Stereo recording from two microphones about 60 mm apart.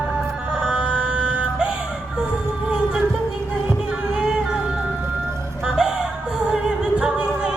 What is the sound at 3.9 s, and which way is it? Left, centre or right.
Music, centre.